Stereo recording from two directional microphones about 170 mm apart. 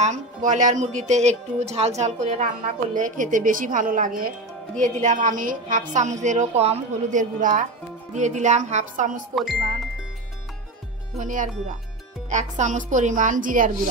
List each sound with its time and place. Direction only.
0.0 s speech: 45° right (ahead or behind)
9.3 s speech: centre (ahead or behind)
11.1 s speech: 50° right (ahead or behind)